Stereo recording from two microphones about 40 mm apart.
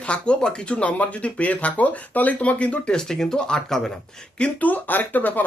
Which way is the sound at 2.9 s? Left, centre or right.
Centre.